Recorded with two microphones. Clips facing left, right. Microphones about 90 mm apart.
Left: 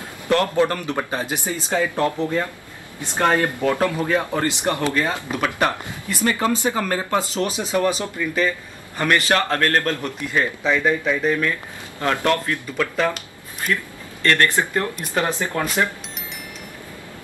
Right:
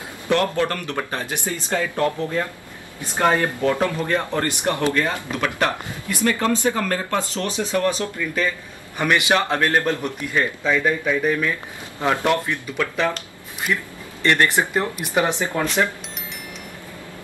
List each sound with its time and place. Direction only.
0.3 s speech: 5° left (ahead or behind)
8.9 s a man's voice: 10° right (ahead or behind)
10.3 s a man's voice: 5° left (ahead or behind)
12.7 s speech: 5° left (ahead or behind)
13.7 s a man's voice: 10° right (ahead or behind)
15.6 s speech: 10° left (ahead or behind)